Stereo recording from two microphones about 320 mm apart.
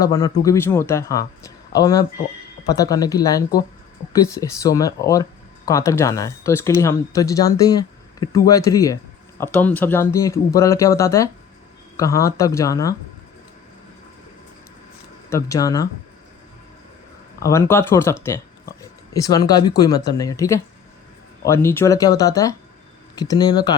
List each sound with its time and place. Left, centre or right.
0.0 s speech: centre
15.3 s speech: centre
17.4 s speech: centre